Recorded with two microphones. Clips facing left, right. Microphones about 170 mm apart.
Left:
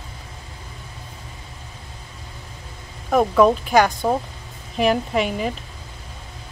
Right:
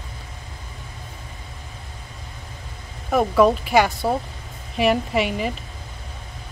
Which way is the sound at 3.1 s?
Centre (ahead or behind).